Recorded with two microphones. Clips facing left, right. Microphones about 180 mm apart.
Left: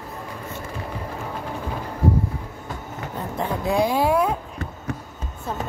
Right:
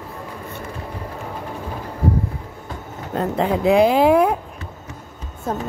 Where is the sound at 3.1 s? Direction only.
65° right (ahead or behind).